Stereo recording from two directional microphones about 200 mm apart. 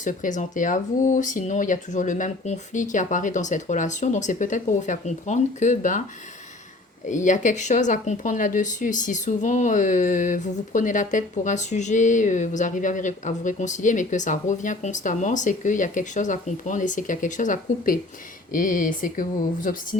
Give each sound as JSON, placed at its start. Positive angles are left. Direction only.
{"t": 0.0, "sound": "speech", "side_deg": 40}
{"t": 7.1, "sound": "speech", "side_deg": 40}